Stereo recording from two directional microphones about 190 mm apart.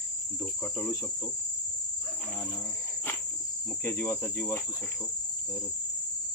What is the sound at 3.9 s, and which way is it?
Cricket, 10° left (ahead or behind).